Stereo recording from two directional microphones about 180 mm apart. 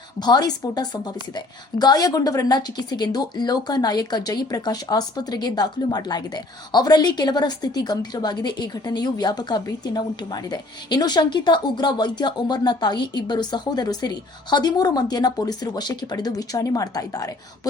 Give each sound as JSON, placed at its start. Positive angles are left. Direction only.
{"t": 0.2, "sound": "a woman's voice", "side_deg": 20}